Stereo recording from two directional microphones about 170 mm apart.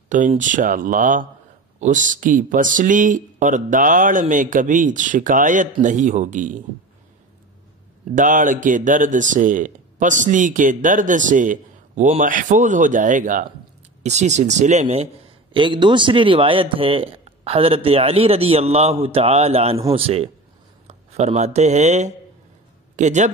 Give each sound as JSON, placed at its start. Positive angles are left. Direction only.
{"t": 0.1, "sound": "speech", "side_deg": -50}
{"t": 8.1, "sound": "speech", "side_deg": -50}
{"t": 15.5, "sound": "speech", "side_deg": -30}